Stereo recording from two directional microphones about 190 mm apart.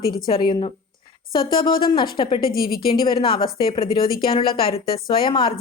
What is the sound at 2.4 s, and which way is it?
Speech, 50° left (ahead or behind).